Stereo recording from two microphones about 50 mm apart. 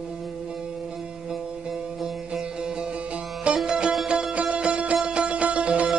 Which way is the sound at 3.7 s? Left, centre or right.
Centre.